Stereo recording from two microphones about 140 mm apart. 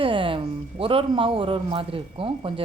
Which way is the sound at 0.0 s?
40° right (ahead or behind).